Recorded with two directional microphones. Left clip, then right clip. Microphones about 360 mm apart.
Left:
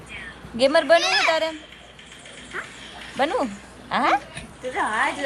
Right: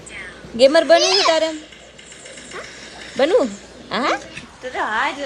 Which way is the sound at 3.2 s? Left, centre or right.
Centre.